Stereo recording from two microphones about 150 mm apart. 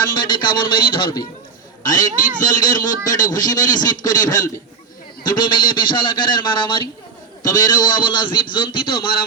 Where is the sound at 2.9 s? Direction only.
60° left (ahead or behind).